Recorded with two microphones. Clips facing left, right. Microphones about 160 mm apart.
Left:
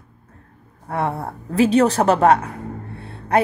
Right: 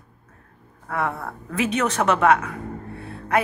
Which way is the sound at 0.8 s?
30° left (ahead or behind).